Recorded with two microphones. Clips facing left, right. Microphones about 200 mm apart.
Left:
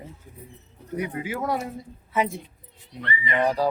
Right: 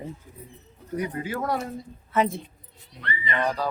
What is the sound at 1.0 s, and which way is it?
Speech, 10° left (ahead or behind).